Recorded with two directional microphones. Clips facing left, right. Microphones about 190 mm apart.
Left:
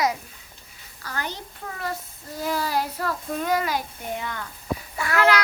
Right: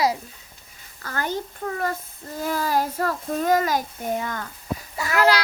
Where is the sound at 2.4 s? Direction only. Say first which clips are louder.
Right 2 dB; 45° right (ahead or behind).